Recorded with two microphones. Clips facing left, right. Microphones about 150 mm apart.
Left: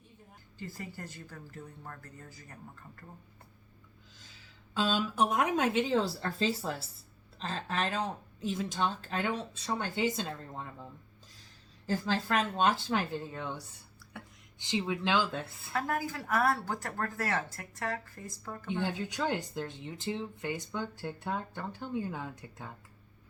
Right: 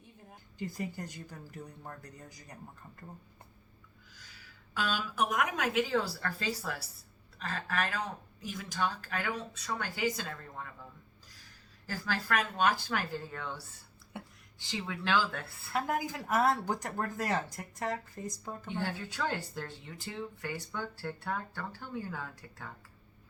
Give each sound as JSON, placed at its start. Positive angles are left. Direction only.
{"t": 0.6, "sound": "speech", "side_deg": -15}
{"t": 4.1, "sound": "a woman's voice", "side_deg": 25}
{"t": 11.9, "sound": "speech", "side_deg": 20}
{"t": 15.7, "sound": "speech", "side_deg": -20}
{"t": 18.7, "sound": "speech", "side_deg": 20}